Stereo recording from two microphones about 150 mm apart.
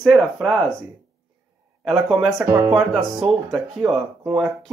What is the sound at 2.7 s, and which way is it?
Speech, centre (ahead or behind).